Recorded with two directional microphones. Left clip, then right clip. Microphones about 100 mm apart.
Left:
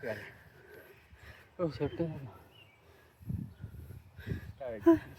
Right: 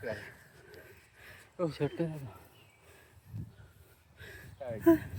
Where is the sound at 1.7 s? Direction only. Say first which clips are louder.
Right 1 dB; 40° right (ahead or behind).